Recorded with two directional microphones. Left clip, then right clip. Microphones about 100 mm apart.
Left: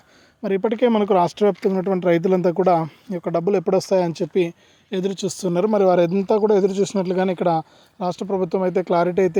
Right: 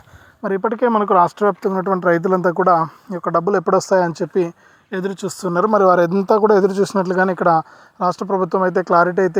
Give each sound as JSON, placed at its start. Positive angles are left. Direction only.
{"t": 0.6, "sound": "speech", "side_deg": 55}
{"t": 4.9, "sound": "speech", "side_deg": 40}
{"t": 5.6, "sound": "speech", "side_deg": 15}